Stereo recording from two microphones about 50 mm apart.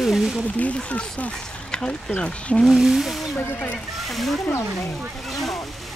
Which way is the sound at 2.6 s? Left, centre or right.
Centre.